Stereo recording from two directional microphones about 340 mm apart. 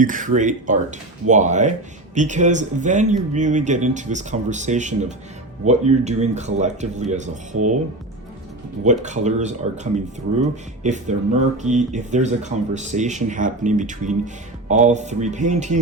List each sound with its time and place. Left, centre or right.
0.0 s speech: right
8.8 s speech: right